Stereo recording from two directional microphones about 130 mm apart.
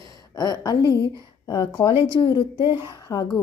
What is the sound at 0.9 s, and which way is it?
Speech, 25° right (ahead or behind).